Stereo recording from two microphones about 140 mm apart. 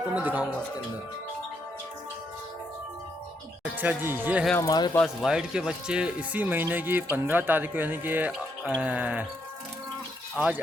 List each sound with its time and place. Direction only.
0.1 s speech: 10° right (ahead or behind)
3.8 s speech: 15° right (ahead or behind)
4.5 s speech: 25° left (ahead or behind)
5.0 s speech: 5° right (ahead or behind)
10.3 s speech: 10° right (ahead or behind)